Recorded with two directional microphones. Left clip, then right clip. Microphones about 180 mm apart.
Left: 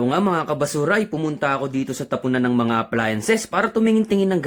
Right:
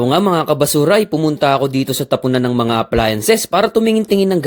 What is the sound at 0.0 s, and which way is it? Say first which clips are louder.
Speech: right 6 dB; 35° right (ahead or behind).